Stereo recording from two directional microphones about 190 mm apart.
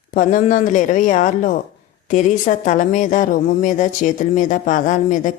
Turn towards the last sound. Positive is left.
turn(degrees=40)  # may be behind; listen again after turning